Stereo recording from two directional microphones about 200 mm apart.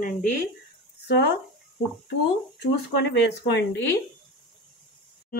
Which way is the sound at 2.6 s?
60° left (ahead or behind).